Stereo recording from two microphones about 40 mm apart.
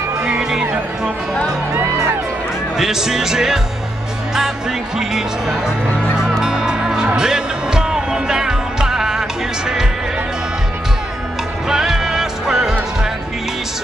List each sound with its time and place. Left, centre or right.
0.2 s music: centre
2.8 s speech: centre
4.9 s speech: centre
6.4 s music: centre
11.7 s music: centre